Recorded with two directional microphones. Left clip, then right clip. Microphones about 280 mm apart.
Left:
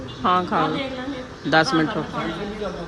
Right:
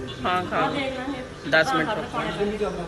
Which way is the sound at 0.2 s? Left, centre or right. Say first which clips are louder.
Left 4 dB; centre.